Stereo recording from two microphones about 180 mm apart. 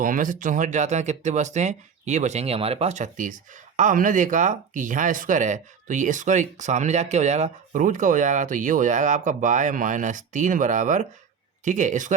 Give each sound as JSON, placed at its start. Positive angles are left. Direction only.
{"t": 0.0, "sound": "speech", "side_deg": -45}